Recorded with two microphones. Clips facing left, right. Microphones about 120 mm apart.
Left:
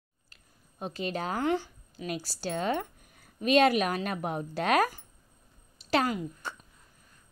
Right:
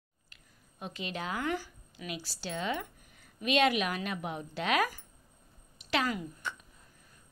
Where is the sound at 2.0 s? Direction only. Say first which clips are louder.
Left 6 dB; 45° left (ahead or behind).